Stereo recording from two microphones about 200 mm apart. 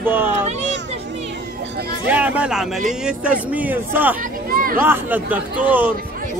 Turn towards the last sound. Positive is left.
turn(degrees=-10)  # may be behind; listen again after turning